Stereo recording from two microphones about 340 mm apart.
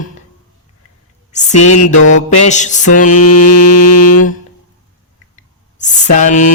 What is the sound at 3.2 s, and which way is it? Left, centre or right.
Mantra, left.